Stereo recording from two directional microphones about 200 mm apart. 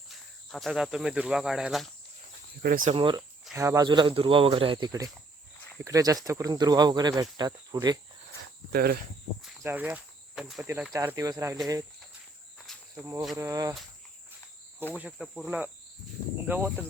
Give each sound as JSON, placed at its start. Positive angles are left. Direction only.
{"t": 0.1, "sound": "speech", "side_deg": 0}
{"t": 2.6, "sound": "speech", "side_deg": -45}
{"t": 2.9, "sound": "speech", "side_deg": -25}
{"t": 3.5, "sound": "speech", "side_deg": -15}
{"t": 8.7, "sound": "speech", "side_deg": -50}
{"t": 9.6, "sound": "speech", "side_deg": -10}
{"t": 13.3, "sound": "speech", "side_deg": -15}
{"t": 14.9, "sound": "speech", "side_deg": -5}